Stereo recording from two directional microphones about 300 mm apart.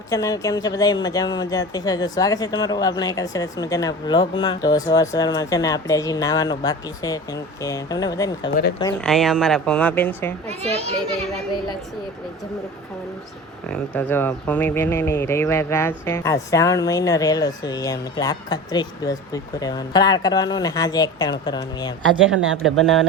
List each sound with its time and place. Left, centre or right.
0.1 s speech: centre
10.6 s a child's voice: right
13.7 s speech: centre
22.4 s speech: right
22.6 s speech: centre